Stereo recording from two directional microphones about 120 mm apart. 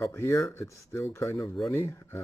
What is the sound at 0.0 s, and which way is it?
Speech, 25° left (ahead or behind).